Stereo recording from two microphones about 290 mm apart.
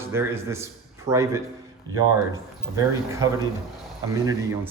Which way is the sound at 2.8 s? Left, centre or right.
Centre.